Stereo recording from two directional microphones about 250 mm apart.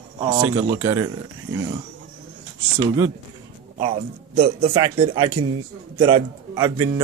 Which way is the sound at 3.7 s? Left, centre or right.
Right.